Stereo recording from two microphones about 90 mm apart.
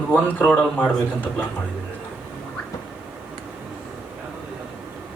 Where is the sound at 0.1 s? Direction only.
20° left (ahead or behind).